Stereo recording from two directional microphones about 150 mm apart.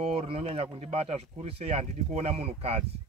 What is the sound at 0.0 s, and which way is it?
Speech, 40° right (ahead or behind).